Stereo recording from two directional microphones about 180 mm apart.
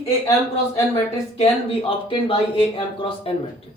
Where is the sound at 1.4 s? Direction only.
30° left (ahead or behind).